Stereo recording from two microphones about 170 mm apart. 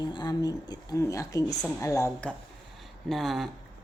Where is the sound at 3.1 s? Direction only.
Centre (ahead or behind).